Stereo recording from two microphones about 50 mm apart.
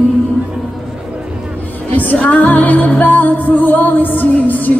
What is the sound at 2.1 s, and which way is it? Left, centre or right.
Music, left.